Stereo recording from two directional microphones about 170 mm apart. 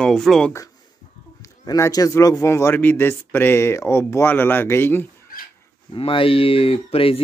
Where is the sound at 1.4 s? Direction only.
20° left (ahead or behind).